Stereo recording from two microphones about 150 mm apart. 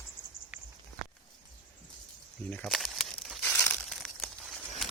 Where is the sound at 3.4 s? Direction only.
10° left (ahead or behind).